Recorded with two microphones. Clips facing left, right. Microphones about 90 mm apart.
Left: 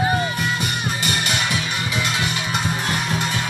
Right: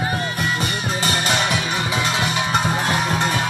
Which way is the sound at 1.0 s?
30° right (ahead or behind).